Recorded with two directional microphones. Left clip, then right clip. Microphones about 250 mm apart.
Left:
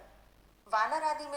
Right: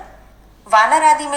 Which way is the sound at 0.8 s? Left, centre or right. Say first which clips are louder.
Right 19 dB; right.